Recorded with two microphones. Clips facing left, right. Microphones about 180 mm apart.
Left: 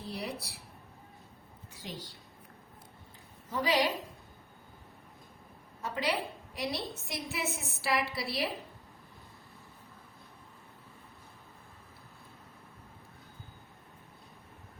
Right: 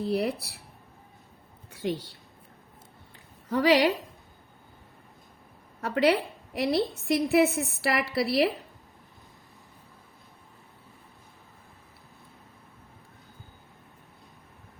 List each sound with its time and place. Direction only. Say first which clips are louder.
0.0 s a woman's voice: right 12 dB; 65° right (ahead or behind)
1.7 s a woman's voice: right 13 dB; 60° right (ahead or behind)
3.5 s a woman's voice: right 8 dB; 70° right (ahead or behind)
5.8 s a woman's voice: right 10 dB; 65° right (ahead or behind)